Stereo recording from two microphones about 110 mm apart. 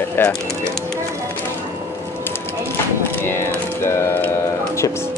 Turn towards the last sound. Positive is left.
turn(degrees=20)  # may be behind; listen again after turning